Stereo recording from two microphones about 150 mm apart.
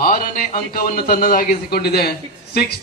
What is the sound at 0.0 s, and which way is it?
A man's voice, 60° left (ahead or behind).